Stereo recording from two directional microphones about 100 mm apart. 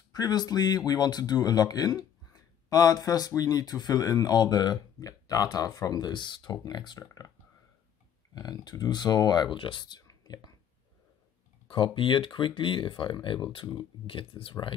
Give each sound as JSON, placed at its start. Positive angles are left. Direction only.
{"t": 0.1, "sound": "speech", "side_deg": 45}
{"t": 8.4, "sound": "speech", "side_deg": 40}
{"t": 10.0, "sound": "whispering", "side_deg": 40}
{"t": 11.6, "sound": "speech", "side_deg": 55}